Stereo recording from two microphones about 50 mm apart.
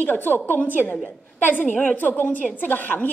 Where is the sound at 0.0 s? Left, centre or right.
Left.